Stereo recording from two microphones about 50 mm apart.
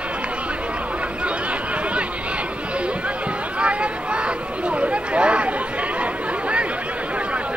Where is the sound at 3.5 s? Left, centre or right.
Right.